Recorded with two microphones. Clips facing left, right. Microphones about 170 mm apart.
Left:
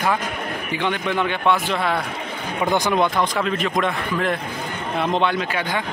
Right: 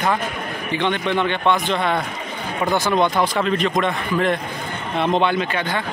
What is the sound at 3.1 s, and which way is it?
A man's voice, centre (ahead or behind).